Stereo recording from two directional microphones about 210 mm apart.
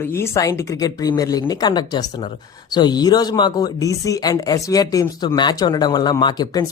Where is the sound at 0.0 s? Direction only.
10° left (ahead or behind).